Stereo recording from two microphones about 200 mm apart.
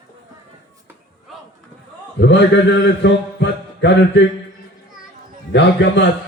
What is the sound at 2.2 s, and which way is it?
A man's voice, 60° left (ahead or behind).